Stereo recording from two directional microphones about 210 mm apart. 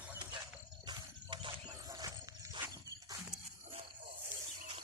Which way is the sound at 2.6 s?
10° right (ahead or behind).